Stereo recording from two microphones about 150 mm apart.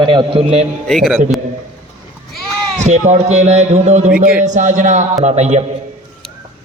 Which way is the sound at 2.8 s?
50° right (ahead or behind).